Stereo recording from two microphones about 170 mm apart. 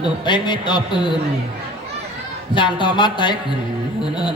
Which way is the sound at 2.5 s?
30° left (ahead or behind).